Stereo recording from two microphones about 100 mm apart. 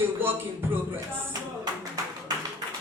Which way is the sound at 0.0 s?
20° right (ahead or behind).